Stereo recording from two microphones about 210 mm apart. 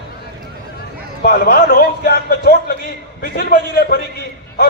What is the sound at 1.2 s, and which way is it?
A man's voice, 45° left (ahead or behind).